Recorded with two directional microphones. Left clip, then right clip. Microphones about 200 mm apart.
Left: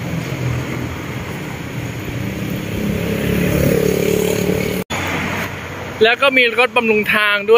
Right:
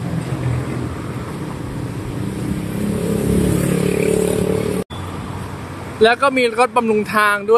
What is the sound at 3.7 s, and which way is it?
Chainsaw, 45° left (ahead or behind).